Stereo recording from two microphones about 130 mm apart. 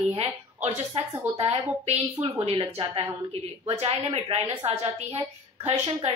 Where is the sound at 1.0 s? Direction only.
50° right (ahead or behind).